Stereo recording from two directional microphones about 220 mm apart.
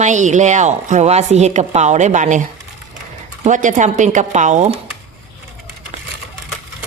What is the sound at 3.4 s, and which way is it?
A woman's voice, 35° right (ahead or behind).